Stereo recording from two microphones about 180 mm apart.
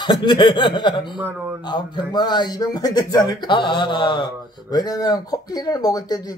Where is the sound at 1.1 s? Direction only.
10° right (ahead or behind).